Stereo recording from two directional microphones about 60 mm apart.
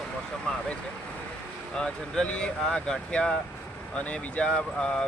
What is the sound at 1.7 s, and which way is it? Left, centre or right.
Speech, centre.